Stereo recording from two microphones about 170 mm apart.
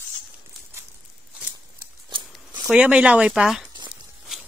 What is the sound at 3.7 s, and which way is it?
Tearing, 25° right (ahead or behind).